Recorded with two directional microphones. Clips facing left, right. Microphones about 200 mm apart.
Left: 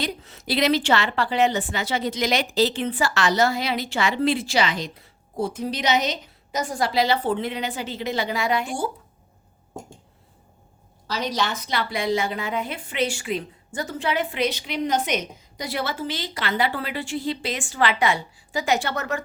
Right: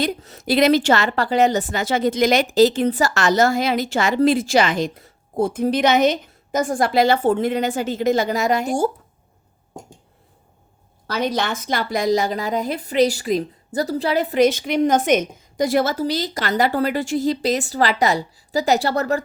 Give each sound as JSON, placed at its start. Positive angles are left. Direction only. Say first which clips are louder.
{"t": 0.0, "sound": "a woman's voice", "louder": "right 6 dB", "side_deg": -45}
{"t": 11.0, "sound": "a woman's voice", "louder": "right 4 dB", "side_deg": -55}